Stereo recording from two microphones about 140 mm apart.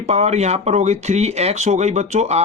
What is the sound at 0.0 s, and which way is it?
Speech, 50° right (ahead or behind).